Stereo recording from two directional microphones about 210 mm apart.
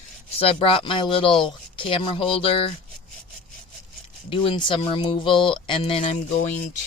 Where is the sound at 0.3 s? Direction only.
25° left (ahead or behind).